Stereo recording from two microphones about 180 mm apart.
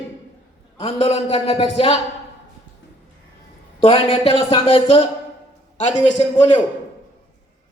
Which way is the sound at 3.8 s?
30° left (ahead or behind).